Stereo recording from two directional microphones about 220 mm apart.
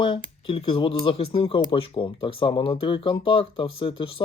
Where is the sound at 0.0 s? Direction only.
25° left (ahead or behind).